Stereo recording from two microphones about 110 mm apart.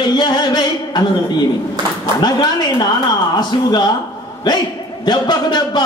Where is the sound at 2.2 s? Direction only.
45° left (ahead or behind).